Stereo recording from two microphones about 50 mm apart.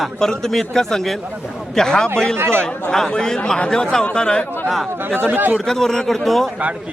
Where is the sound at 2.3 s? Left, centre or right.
Right.